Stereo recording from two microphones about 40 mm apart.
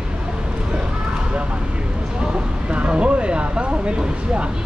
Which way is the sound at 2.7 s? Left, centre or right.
Right.